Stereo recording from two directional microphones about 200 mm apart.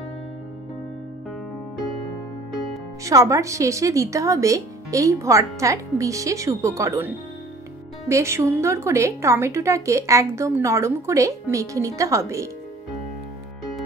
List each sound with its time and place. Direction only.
3.1 s speech: 15° right (ahead or behind)
8.1 s speech: 15° right (ahead or behind)